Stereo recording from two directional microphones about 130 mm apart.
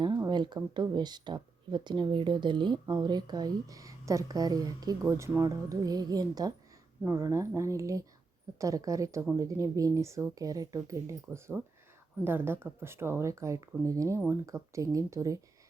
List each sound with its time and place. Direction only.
0.0 s speech: 35° right (ahead or behind)